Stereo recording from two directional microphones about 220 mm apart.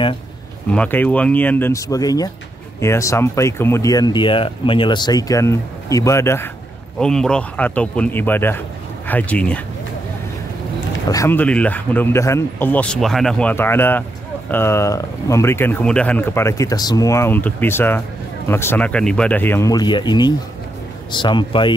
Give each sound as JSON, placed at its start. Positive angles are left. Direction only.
{"t": 0.7, "sound": "speech", "side_deg": 5}
{"t": 11.1, "sound": "speech", "side_deg": 10}